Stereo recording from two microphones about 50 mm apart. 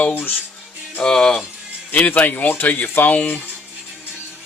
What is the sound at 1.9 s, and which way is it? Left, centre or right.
Speech, left.